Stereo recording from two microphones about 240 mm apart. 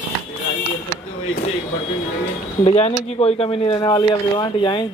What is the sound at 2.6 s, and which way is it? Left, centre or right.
Speech, left.